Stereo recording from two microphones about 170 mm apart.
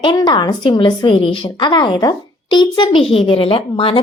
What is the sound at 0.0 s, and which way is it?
A woman's voice, 25° left (ahead or behind).